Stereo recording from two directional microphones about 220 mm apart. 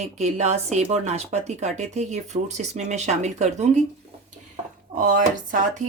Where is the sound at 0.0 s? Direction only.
30° right (ahead or behind).